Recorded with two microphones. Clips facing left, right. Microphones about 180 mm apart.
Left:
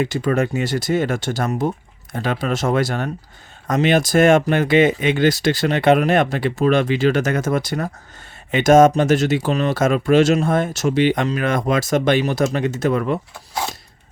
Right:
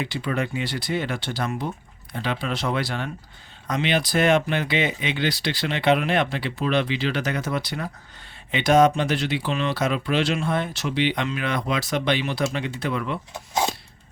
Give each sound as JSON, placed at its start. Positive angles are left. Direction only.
{"t": 0.0, "sound": "speech", "side_deg": 45}